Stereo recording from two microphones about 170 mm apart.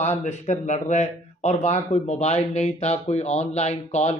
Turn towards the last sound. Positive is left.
turn(degrees=40)  # may be behind; listen again after turning